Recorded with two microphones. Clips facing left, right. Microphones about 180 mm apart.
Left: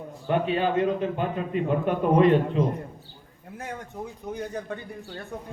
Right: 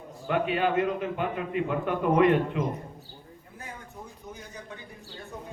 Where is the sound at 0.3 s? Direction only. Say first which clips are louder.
Left 2 dB; 30° left (ahead or behind).